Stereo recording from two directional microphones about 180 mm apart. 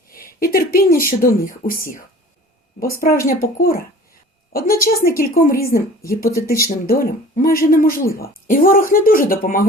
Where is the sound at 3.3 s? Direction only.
55° left (ahead or behind).